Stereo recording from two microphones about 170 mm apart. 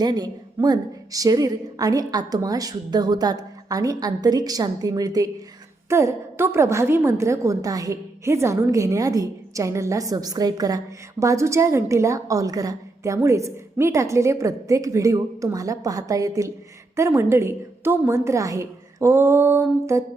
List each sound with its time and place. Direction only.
0.0 s a woman's voice: 25° right (ahead or behind)